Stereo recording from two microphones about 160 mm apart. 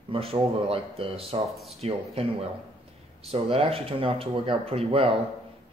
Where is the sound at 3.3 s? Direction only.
35° right (ahead or behind).